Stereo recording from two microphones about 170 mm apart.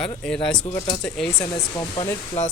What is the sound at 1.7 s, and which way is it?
Speech, 25° left (ahead or behind).